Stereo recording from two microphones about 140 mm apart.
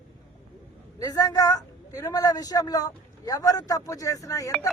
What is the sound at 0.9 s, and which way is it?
A man's voice, 25° left (ahead or behind).